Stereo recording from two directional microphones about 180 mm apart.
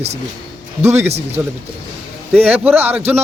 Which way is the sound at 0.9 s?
35° right (ahead or behind).